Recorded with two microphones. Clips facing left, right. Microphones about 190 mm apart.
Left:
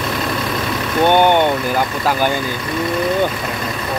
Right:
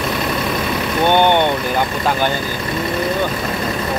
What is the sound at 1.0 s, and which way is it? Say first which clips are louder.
Speech: left 1 dB; 10° left (ahead or behind).